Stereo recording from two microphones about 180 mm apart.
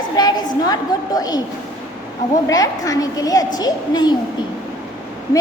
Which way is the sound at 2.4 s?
20° left (ahead or behind).